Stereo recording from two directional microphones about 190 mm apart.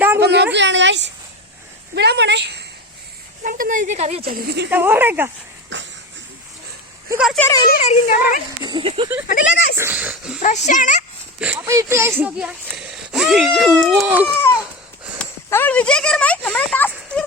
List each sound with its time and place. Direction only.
0.2 s speech: 60° right (ahead or behind)
3.4 s speech: 45° right (ahead or behind)
4.3 s speech: 55° right (ahead or behind)
4.7 s speech: 10° right (ahead or behind)
7.3 s speech: 15° left (ahead or behind)
8.0 s speech: 50° left (ahead or behind)
8.6 s speech: 25° right (ahead or behind)
9.4 s speech: 60° left (ahead or behind)
9.7 s speech: 10° right (ahead or behind)
10.4 s speech: 40° left (ahead or behind)
11.3 s speech: 5° right (ahead or behind)
14.3 s speech: 15° left (ahead or behind)